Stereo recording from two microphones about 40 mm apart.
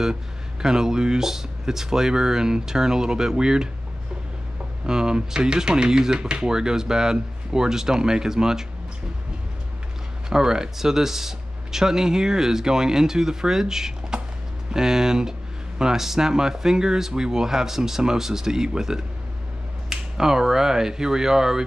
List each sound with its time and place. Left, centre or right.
0.0 s speech: centre
4.8 s speech: centre
10.3 s speech: centre